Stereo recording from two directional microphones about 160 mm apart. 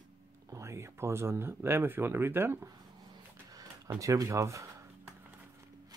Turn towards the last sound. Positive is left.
turn(degrees=-20)  # may be behind; listen again after turning